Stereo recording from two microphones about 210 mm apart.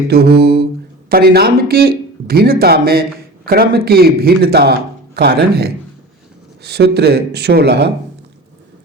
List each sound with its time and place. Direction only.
0.1 s speech: 50° right (ahead or behind)